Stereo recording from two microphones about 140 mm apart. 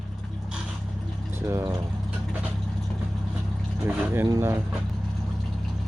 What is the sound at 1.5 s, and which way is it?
Speech, 20° right (ahead or behind).